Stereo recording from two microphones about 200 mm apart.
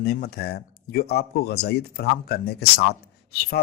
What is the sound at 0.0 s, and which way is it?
Speech, 50° left (ahead or behind).